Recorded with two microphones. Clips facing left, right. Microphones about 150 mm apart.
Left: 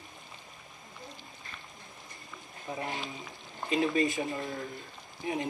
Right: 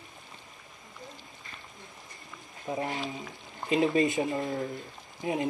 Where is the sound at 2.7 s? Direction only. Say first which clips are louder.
Right 4 dB; 20° right (ahead or behind).